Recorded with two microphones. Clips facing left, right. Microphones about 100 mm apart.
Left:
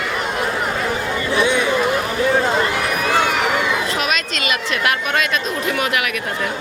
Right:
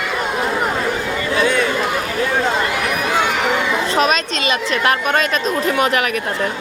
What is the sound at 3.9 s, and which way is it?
A woman's voice, 35° right (ahead or behind).